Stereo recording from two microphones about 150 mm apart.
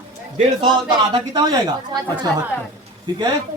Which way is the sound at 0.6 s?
35° right (ahead or behind).